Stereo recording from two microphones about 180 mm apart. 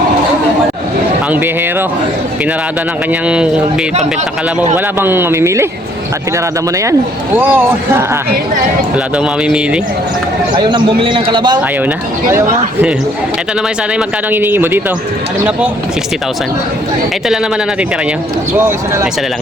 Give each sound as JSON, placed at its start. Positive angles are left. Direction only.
{"t": 3.1, "sound": "speech", "side_deg": -5}
{"t": 4.9, "sound": "speech", "side_deg": -10}
{"t": 7.3, "sound": "speech", "side_deg": -10}
{"t": 10.5, "sound": "speech", "side_deg": -25}
{"t": 14.3, "sound": "speech", "side_deg": -10}
{"t": 18.5, "sound": "speech", "side_deg": -15}